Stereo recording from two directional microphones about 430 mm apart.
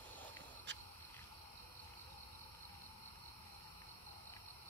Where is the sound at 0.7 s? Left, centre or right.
Right.